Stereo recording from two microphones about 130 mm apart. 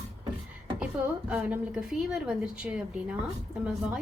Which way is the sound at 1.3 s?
10° right (ahead or behind).